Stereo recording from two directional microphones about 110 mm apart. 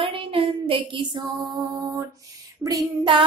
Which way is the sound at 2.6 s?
30° right (ahead or behind).